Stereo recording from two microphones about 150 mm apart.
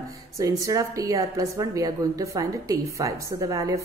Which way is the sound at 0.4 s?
20° right (ahead or behind).